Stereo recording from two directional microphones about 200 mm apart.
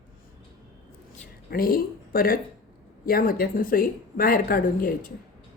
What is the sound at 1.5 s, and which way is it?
Speech, 45° left (ahead or behind).